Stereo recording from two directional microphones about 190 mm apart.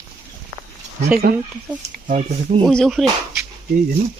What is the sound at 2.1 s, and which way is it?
Speech, 30° right (ahead or behind).